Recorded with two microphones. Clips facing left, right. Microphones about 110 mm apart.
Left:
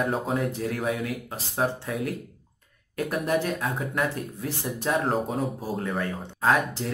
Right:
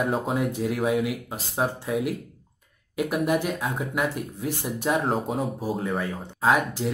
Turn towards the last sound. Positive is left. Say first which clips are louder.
# right 1 dB
turn(degrees=-5)  # may be behind; listen again after turning